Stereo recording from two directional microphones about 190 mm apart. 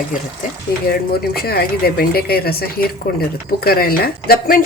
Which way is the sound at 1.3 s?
55° left (ahead or behind).